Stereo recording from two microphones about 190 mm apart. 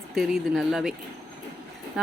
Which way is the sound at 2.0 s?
5° right (ahead or behind).